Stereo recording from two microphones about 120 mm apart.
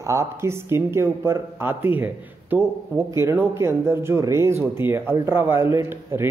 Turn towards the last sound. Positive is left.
turn(degrees=-20)  # may be behind; listen again after turning